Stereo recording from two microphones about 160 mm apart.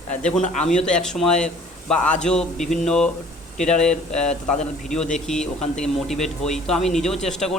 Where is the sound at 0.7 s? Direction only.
50° left (ahead or behind).